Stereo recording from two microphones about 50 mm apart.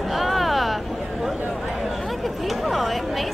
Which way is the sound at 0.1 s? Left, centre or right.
Centre.